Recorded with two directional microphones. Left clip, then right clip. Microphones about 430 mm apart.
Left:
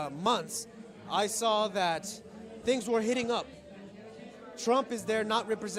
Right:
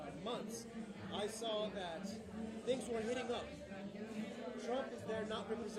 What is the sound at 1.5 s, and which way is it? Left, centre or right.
Speech, left.